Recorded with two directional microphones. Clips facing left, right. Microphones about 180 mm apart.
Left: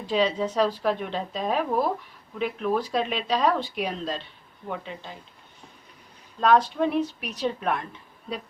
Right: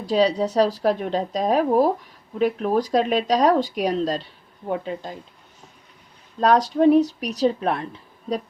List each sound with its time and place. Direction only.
0.0 s speech: 40° right (ahead or behind)
6.4 s speech: 40° right (ahead or behind)